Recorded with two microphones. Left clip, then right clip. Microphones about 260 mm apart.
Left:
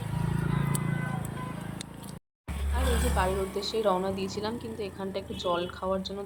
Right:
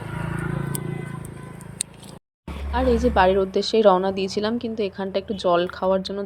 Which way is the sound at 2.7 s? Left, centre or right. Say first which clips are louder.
Right 11 dB; right.